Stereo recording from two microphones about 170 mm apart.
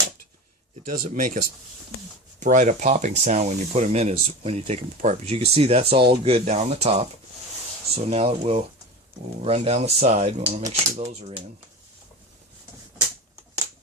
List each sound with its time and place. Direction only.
0.9 s speech: 55° right (ahead or behind)
2.4 s speech: 50° right (ahead or behind)